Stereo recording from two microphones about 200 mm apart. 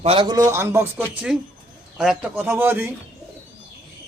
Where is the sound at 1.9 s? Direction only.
5° right (ahead or behind).